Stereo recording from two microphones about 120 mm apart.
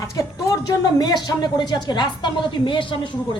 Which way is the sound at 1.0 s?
35° left (ahead or behind).